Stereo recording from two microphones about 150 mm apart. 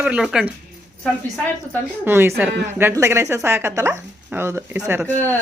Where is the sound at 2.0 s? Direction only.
15° right (ahead or behind).